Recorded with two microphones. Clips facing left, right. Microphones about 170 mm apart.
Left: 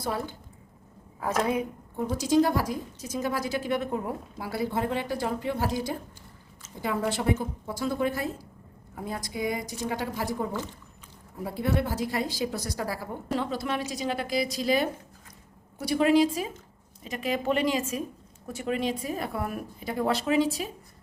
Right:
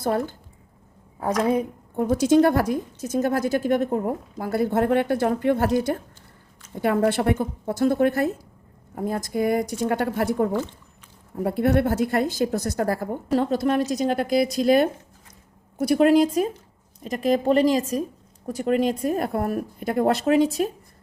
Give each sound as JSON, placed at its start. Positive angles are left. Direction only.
{"t": 0.0, "sound": "a woman's voice", "side_deg": -50}
{"t": 1.2, "sound": "a woman's voice", "side_deg": -35}
{"t": 2.0, "sound": "a woman's voice", "side_deg": -55}
{"t": 19.8, "sound": "a woman's voice", "side_deg": -55}